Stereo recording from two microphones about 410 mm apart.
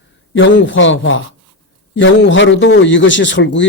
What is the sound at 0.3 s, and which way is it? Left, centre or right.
A man's voice, left.